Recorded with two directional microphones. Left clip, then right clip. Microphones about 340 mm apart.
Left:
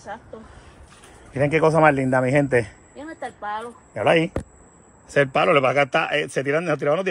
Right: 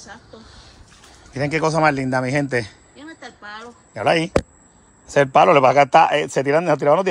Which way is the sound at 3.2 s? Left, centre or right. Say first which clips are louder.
Left 8 dB; centre.